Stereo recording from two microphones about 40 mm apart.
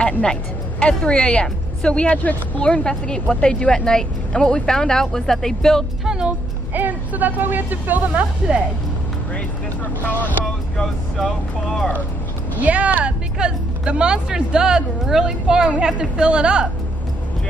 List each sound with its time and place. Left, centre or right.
0.2 s a woman's voice: left
6.0 s speech: centre
6.7 s speech: right
8.1 s speech: right
10.0 s speech: left
10.8 s speech: centre
12.5 s speech: right
13.0 s speech: right